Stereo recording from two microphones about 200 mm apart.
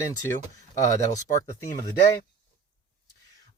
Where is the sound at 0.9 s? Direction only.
15° left (ahead or behind).